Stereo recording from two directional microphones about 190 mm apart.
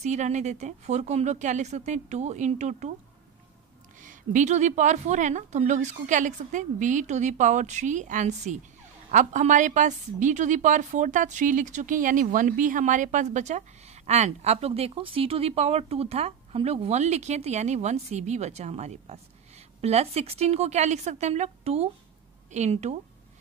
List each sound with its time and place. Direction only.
0.0 s a woman's voice: 40° right (ahead or behind)
4.0 s a woman's voice: 40° right (ahead or behind)